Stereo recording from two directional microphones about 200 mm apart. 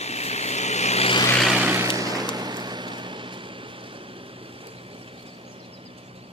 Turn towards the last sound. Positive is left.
turn(degrees=-25)  # may be behind; listen again after turning